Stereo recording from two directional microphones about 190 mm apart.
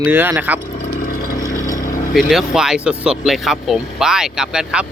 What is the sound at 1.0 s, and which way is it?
Vehicle, 50° left (ahead or behind).